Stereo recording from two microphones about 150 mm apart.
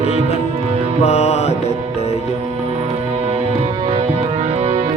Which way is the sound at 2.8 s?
45° right (ahead or behind).